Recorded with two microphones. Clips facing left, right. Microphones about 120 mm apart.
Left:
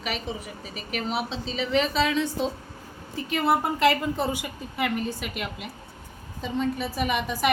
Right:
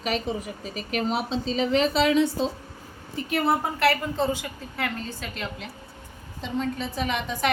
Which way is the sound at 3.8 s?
15° left (ahead or behind).